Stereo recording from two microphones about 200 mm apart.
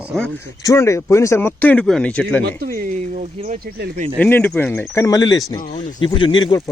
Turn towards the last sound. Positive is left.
turn(degrees=20)  # may be behind; listen again after turning